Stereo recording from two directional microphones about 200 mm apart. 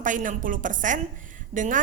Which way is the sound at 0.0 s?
40° right (ahead or behind).